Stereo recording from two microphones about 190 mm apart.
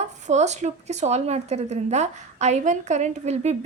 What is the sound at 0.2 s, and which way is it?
A woman's voice, 35° right (ahead or behind).